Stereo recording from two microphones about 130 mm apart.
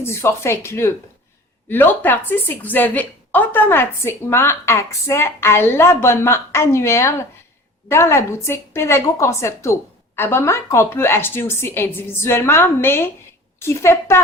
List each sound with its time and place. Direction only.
0.0 s a woman's voice: 20° left (ahead or behind)